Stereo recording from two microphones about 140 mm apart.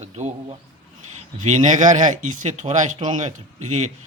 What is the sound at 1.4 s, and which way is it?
Speech, 60° right (ahead or behind).